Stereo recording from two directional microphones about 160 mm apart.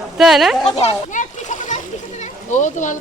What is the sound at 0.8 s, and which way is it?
Splash, 50° left (ahead or behind).